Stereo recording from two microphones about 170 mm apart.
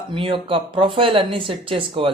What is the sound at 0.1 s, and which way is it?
Speech, 30° right (ahead or behind).